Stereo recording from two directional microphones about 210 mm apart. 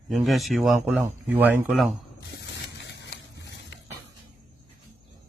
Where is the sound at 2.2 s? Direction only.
55° left (ahead or behind).